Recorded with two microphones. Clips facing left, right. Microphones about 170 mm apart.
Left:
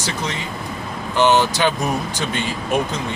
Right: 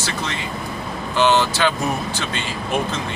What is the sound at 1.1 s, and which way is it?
Speech, 15° left (ahead or behind).